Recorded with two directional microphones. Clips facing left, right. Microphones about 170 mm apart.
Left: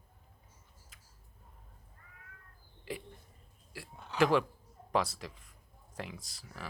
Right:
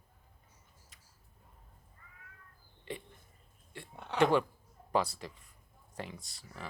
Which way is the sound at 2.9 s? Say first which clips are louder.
Left 1 dB; centre (ahead or behind).